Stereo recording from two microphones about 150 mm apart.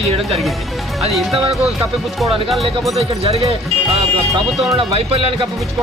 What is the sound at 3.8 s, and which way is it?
Speech, centre (ahead or behind).